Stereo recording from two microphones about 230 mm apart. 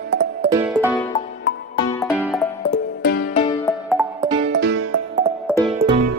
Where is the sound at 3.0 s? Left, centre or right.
Left.